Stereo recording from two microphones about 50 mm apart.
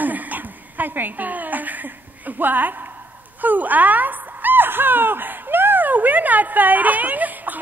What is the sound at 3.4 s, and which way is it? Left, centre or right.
Speech, right.